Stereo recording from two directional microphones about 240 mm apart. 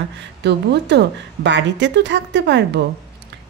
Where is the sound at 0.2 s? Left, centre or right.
Right.